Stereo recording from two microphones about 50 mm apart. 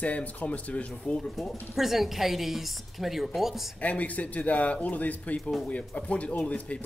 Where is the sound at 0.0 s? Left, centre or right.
Left.